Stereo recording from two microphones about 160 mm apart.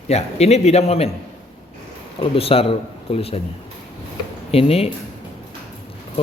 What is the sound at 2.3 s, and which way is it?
A man's voice, 35° left (ahead or behind).